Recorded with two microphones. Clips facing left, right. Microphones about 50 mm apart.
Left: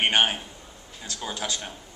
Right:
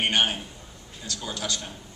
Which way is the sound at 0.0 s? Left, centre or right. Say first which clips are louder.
Left 2 dB; left.